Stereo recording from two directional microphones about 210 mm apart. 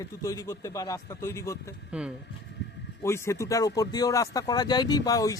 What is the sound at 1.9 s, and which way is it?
Speech, 5° right (ahead or behind).